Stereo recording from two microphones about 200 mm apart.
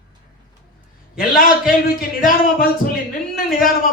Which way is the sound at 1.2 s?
45° left (ahead or behind).